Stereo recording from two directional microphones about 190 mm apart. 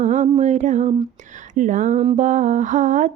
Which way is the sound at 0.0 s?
40° right (ahead or behind).